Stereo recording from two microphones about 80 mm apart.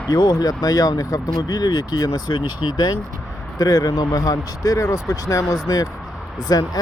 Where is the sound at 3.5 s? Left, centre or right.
Left.